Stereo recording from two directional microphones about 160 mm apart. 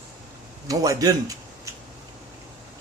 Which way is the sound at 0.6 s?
20° right (ahead or behind).